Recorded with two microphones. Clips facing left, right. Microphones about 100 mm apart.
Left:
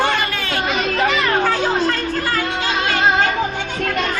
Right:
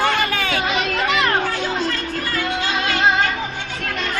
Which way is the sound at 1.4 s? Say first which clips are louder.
Left 5 dB; 60° left (ahead or behind).